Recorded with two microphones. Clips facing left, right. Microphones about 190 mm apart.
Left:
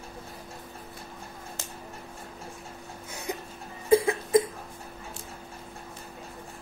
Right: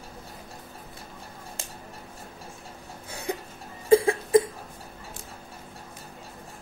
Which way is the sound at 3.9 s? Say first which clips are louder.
Right 3 dB; 30° right (ahead or behind).